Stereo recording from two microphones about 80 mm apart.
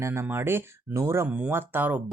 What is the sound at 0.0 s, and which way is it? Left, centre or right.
Speech, right.